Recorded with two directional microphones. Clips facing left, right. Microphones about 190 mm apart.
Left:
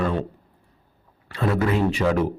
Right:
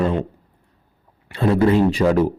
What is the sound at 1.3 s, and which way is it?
Speech, 30° right (ahead or behind).